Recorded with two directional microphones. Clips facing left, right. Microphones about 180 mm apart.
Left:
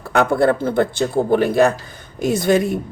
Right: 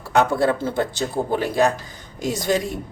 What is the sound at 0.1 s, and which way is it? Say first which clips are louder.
Speech: left 3 dB; 55° left (ahead or behind).